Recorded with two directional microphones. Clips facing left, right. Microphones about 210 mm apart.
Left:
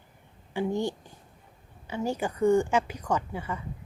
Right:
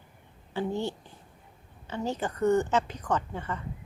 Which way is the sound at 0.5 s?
15° left (ahead or behind).